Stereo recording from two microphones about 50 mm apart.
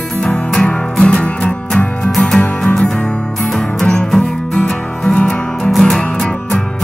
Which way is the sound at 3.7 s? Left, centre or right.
Centre.